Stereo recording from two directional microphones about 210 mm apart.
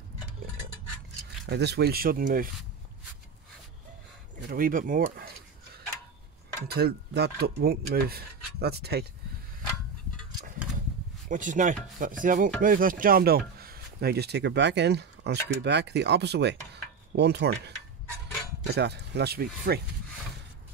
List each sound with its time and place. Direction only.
1.4 s speech: 50° right (ahead or behind)
4.4 s speech: 40° right (ahead or behind)
6.7 s speech: 45° right (ahead or behind)
11.2 s speech: 40° right (ahead or behind)